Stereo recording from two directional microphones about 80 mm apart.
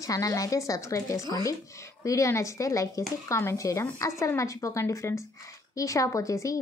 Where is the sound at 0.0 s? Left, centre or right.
Left.